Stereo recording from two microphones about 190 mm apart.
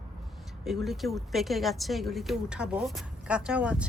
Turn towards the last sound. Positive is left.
turn(degrees=-5)  # may be behind; listen again after turning